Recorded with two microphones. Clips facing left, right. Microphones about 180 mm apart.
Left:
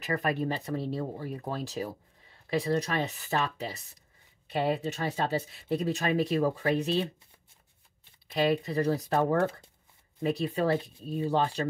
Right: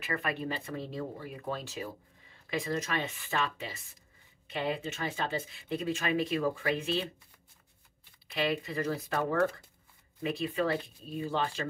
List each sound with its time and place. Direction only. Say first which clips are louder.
0.0 s speech: left 5 dB; 40° left (ahead or behind)
8.3 s speech: left 5 dB; 40° left (ahead or behind)
10.2 s speech: left 3 dB; 40° left (ahead or behind)